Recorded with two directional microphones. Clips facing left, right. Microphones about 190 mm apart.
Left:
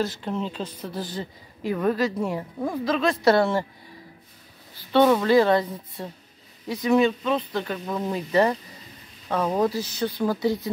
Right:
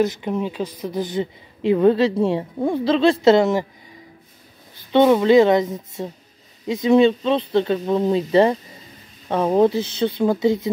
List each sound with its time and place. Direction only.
0.0 s speech: 15° right (ahead or behind)
4.9 s speech: 20° right (ahead or behind)